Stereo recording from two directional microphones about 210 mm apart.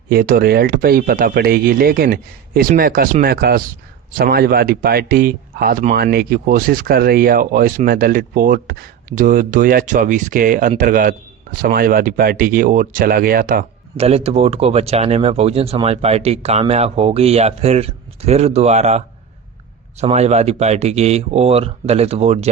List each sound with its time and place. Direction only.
0.1 s speech: 45° right (ahead or behind)
13.9 s speech: 30° right (ahead or behind)